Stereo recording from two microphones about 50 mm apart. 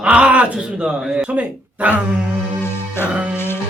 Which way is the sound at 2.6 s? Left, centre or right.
Left.